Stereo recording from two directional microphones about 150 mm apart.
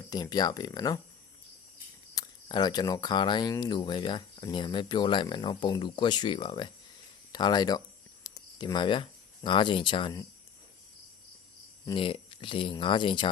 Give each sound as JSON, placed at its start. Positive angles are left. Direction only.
{"t": 0.1, "sound": "speech", "side_deg": 25}
{"t": 2.1, "sound": "speech", "side_deg": 30}
{"t": 11.9, "sound": "speech", "side_deg": 35}